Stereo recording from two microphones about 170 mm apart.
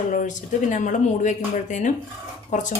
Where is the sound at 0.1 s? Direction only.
50° left (ahead or behind).